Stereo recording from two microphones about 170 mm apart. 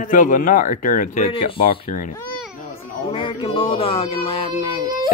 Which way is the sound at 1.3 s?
30° left (ahead or behind).